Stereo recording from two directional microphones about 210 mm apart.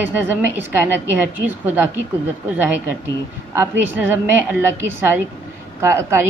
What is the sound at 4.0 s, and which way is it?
A woman's voice, 10° right (ahead or behind).